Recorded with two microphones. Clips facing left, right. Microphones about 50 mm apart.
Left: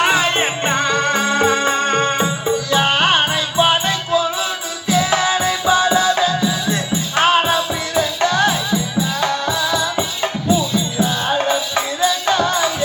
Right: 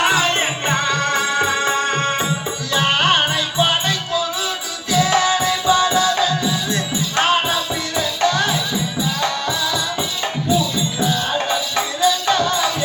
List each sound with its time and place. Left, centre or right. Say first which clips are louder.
0.0 s music: left 1 dB; centre
1.7 s music: left 2 dB; centre
2.7 s music: even; centre
11.9 s music: even; centre